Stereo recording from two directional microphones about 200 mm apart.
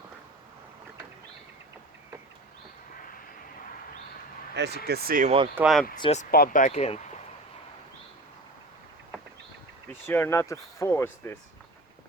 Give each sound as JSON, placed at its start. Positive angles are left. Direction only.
{"t": 4.5, "sound": "speech", "side_deg": -60}
{"t": 5.5, "sound": "speech", "side_deg": -5}
{"t": 6.0, "sound": "speech", "side_deg": 35}
{"t": 6.3, "sound": "speech", "side_deg": 45}
{"t": 9.9, "sound": "speech", "side_deg": 10}